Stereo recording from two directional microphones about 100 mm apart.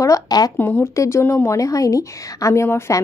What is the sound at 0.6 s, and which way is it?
Speech, 20° left (ahead or behind).